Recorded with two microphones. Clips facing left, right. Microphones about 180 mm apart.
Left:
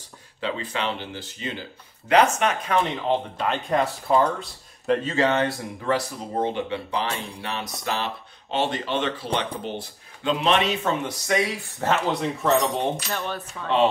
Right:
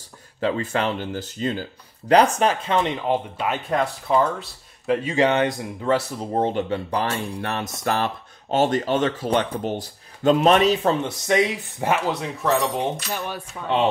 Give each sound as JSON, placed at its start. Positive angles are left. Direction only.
{"t": 0.4, "sound": "speech", "side_deg": -45}
{"t": 3.1, "sound": "speech", "side_deg": -5}
{"t": 6.3, "sound": "speech", "side_deg": -40}
{"t": 12.1, "sound": "speech", "side_deg": 0}